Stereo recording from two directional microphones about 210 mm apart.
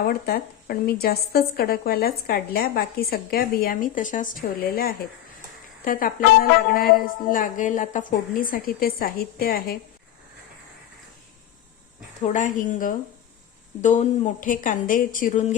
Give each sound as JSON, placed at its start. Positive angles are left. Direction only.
{"t": 0.0, "sound": "a woman's voice", "side_deg": 45}
{"t": 12.2, "sound": "a woman's voice", "side_deg": 35}